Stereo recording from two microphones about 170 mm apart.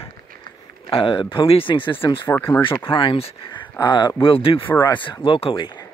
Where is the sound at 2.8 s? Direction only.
30° left (ahead or behind).